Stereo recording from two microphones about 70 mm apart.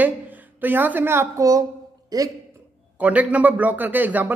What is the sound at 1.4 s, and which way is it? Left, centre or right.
Speech, right.